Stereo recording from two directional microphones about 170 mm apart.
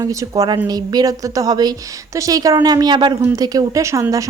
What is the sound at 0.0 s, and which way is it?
A woman's voice, 20° right (ahead or behind).